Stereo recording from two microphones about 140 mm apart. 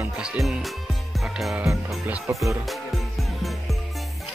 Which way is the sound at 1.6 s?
20° right (ahead or behind).